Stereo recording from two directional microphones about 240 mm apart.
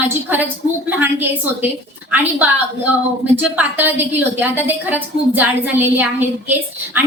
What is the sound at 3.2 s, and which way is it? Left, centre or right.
A woman's voice, centre.